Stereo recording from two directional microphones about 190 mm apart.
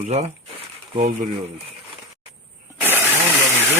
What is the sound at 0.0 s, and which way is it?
Speech, 35° right (ahead or behind).